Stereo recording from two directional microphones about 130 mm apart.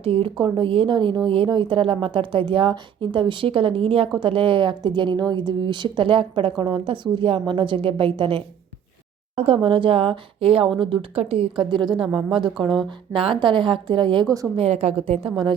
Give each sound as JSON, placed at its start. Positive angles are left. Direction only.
{"t": 0.0, "sound": "a woman's voice", "side_deg": -45}
{"t": 11.9, "sound": "speech", "side_deg": 0}
{"t": 12.3, "sound": "a woman's voice", "side_deg": -40}
{"t": 12.6, "sound": "speech", "side_deg": 0}
{"t": 13.1, "sound": "a woman's voice", "side_deg": -40}
{"t": 14.5, "sound": "speech", "side_deg": -50}